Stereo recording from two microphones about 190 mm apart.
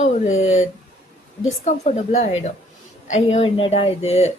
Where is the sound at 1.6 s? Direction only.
35° left (ahead or behind).